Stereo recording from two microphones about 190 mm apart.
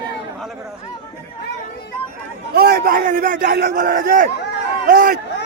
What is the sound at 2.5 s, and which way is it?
A man's voice, 55° right (ahead or behind).